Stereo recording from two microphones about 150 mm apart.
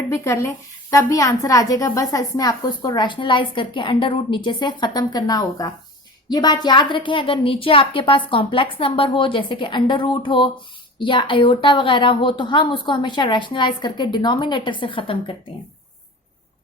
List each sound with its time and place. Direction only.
0.1 s a woman's voice: 20° left (ahead or behind); by 15.4 s 35° left (ahead or behind)